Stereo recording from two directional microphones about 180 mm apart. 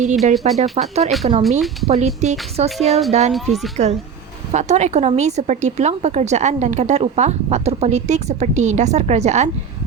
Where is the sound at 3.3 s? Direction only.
Centre (ahead or behind).